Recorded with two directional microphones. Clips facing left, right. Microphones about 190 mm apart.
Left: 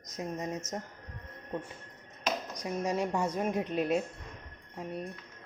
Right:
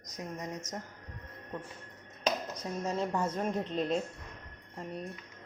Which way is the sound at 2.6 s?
10° left (ahead or behind).